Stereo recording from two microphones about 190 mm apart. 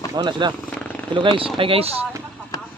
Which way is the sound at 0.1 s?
25° right (ahead or behind).